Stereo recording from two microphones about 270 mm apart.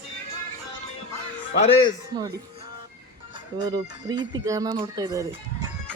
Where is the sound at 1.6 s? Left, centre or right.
Centre.